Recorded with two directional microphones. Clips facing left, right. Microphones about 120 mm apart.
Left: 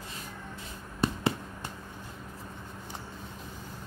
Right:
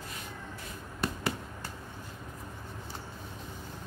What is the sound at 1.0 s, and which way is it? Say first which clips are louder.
Fireworks: left 5 dB; 25° left (ahead or behind).